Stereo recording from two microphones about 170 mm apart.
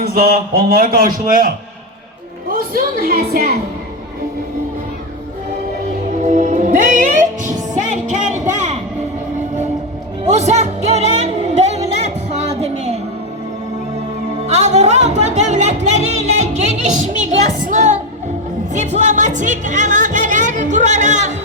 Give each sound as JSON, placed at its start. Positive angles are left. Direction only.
{"t": 0.0, "sound": "a man's voice", "side_deg": -60}
{"t": 6.2, "sound": "music", "side_deg": -45}
{"t": 10.2, "sound": "music", "side_deg": -40}
{"t": 14.4, "sound": "music", "side_deg": -40}
{"t": 17.7, "sound": "a woman's voice", "side_deg": -45}
{"t": 18.7, "sound": "music", "side_deg": -45}